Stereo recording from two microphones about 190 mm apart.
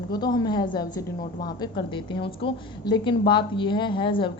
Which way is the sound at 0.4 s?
25° left (ahead or behind).